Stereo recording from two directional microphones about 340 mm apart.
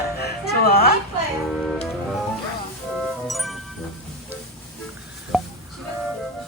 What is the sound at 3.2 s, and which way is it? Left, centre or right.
Music, centre.